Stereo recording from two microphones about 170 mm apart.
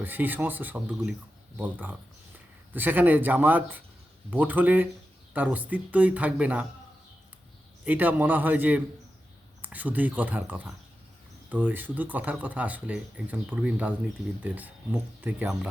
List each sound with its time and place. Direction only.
0.0 s speech: 10° right (ahead or behind)
7.9 s speech: 10° right (ahead or behind)